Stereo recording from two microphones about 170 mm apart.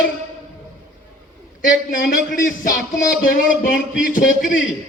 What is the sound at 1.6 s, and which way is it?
Speech, 55° left (ahead or behind).